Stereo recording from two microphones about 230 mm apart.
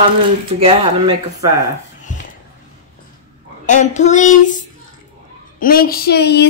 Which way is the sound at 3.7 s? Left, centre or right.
Left.